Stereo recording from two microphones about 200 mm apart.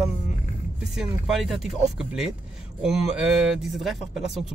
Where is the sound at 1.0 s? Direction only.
Centre (ahead or behind).